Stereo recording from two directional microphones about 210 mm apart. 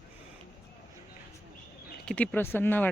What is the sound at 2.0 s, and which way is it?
Speech, 5° left (ahead or behind).